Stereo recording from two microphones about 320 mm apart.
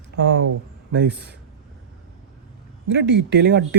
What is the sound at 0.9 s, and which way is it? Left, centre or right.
Speech, right.